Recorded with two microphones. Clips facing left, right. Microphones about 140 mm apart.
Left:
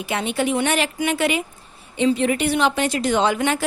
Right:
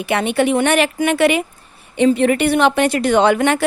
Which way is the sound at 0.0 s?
65° right (ahead or behind).